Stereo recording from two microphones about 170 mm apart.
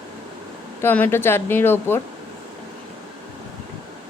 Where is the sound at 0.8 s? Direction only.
10° left (ahead or behind).